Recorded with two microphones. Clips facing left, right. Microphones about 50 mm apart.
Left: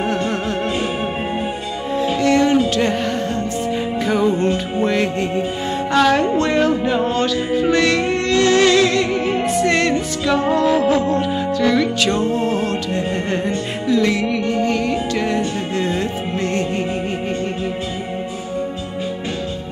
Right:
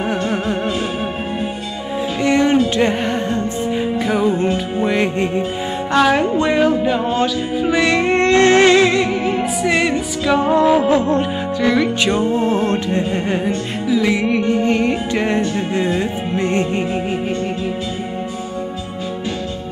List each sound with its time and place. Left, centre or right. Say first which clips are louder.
2.2 s a sound: right 1 dB; right
2.7 s music: right 2 dB; right
4.0 s music: left 1 dB; centre
6.7 s music: right 1 dB; centre
8.0 s music: right 4 dB; right
9.0 s music: even; centre; by 11.2 s right
11.6 s music: right 1 dB; centre
12.0 s music: right 1 dB; right
13.8 s music: even; centre
14.1 s music: right 2 dB; right